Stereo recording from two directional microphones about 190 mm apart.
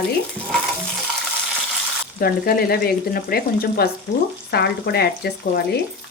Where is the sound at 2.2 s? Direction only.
55° left (ahead or behind).